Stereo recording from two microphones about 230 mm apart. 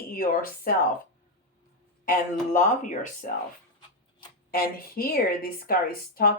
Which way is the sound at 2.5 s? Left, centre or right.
Left.